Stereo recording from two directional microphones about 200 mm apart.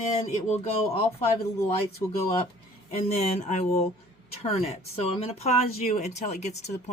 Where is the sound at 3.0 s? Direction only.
35° left (ahead or behind).